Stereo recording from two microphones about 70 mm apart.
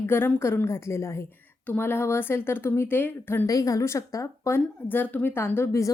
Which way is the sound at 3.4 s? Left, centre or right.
Left.